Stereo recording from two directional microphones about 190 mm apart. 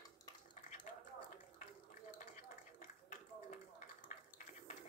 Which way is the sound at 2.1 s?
45° left (ahead or behind).